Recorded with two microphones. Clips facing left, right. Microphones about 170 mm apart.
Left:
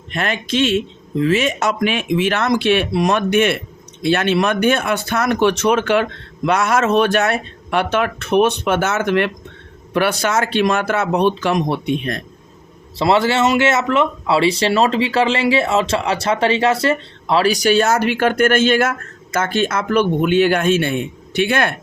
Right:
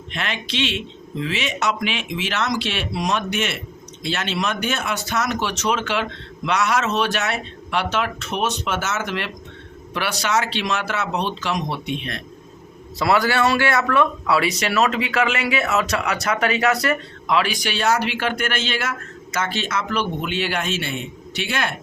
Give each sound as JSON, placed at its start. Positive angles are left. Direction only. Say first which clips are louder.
{"t": 0.1, "sound": "speech", "louder": "left 7 dB", "side_deg": 45}
{"t": 13.0, "sound": "speech", "louder": "left 4 dB", "side_deg": 25}